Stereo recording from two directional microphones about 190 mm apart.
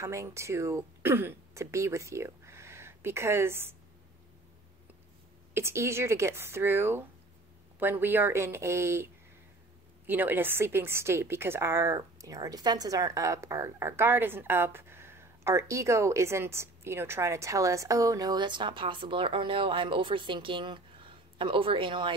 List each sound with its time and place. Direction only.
0.0 s speech: 15° right (ahead or behind)
5.5 s a woman's voice: 15° right (ahead or behind)